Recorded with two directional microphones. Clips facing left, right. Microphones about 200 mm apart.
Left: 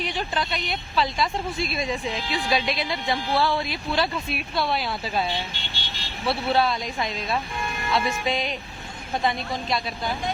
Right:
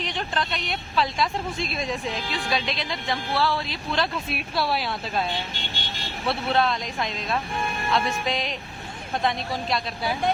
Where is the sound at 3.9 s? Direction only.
Centre (ahead or behind).